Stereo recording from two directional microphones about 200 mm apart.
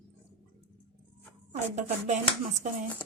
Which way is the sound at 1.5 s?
35° right (ahead or behind).